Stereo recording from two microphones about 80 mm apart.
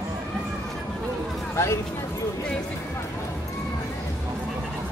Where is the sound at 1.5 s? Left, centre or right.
Left.